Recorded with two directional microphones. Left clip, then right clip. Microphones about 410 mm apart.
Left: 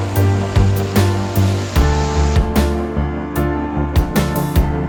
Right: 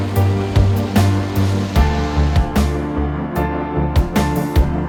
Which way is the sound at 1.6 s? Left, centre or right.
Left.